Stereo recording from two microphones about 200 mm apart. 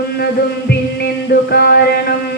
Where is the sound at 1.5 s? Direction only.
55° left (ahead or behind).